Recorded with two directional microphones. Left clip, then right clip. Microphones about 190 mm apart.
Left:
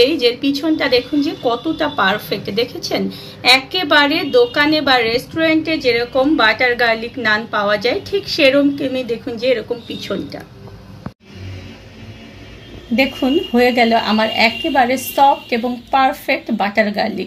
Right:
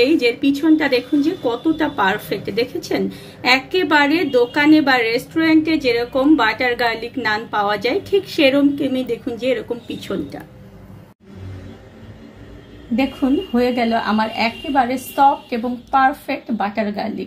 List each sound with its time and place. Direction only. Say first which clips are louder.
0.2 s a woman's voice: even; 45° right (ahead or behind)
12.9 s a woman's voice: left 3 dB; 35° left (ahead or behind)